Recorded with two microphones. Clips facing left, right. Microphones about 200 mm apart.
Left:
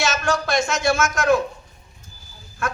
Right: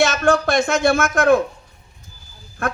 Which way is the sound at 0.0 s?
55° right (ahead or behind).